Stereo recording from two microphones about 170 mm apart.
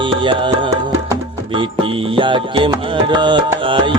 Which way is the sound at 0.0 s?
30° right (ahead or behind).